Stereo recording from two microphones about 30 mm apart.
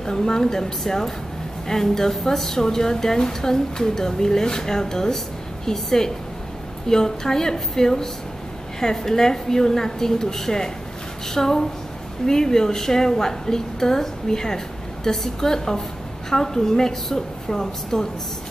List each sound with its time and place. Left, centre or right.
0.0 s a woman's voice: centre